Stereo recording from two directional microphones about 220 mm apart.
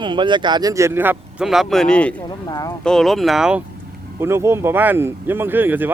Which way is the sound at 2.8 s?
Centre (ahead or behind).